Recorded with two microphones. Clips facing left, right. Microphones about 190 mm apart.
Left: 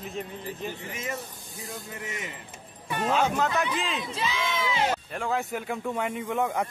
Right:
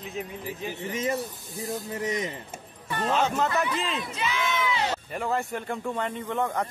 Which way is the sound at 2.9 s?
10° left (ahead or behind).